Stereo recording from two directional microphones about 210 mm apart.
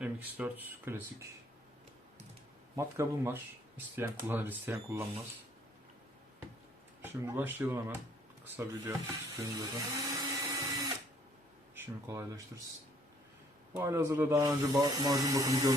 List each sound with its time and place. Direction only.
0.0 s speech: 5° right (ahead or behind)
2.7 s speech: 10° right (ahead or behind)
7.0 s speech: 10° right (ahead or behind)
9.4 s drill: 15° right (ahead or behind)
11.7 s speech: 10° right (ahead or behind)
13.7 s speech: 10° right (ahead or behind)